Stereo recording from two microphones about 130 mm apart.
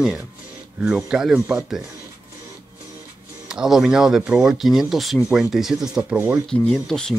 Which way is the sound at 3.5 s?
5° right (ahead or behind).